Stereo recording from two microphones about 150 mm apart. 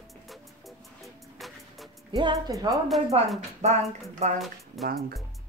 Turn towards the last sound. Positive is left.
turn(degrees=0)  # may be behind; listen again after turning